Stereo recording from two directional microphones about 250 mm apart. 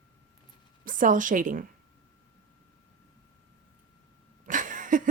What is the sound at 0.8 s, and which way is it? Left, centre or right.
Speech, right.